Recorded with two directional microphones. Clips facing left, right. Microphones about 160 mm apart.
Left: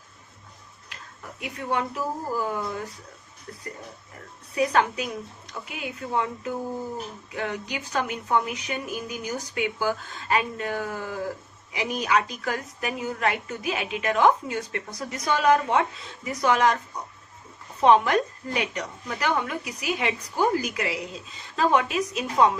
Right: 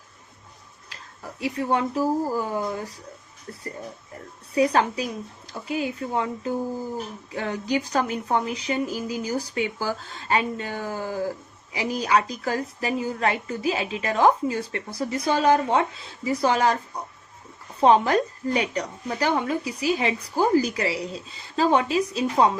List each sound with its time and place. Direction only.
1.4 s a woman's voice: 30° right (ahead or behind)
4.5 s a woman's voice: 30° right (ahead or behind)
17.7 s a woman's voice: 30° right (ahead or behind)